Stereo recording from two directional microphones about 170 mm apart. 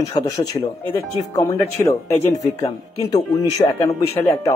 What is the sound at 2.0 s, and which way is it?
Speech, 15° left (ahead or behind).